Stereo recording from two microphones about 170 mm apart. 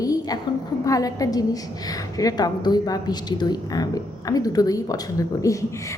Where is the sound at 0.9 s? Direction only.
20° left (ahead or behind).